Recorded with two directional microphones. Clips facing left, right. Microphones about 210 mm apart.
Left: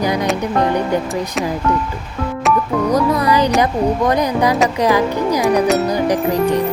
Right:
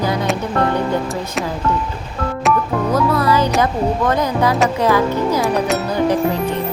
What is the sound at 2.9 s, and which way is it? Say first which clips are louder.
Speech: even; 15° left (ahead or behind).